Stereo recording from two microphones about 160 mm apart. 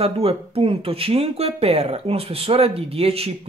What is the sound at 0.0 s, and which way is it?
Speech, 35° right (ahead or behind).